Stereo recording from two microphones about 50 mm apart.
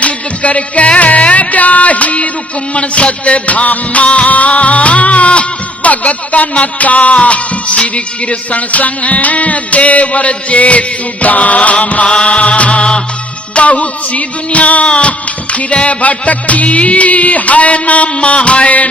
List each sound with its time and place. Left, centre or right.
0.0 s music: left